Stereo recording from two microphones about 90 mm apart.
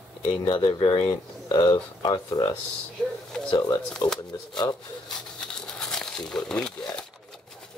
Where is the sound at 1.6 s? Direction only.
50° left (ahead or behind).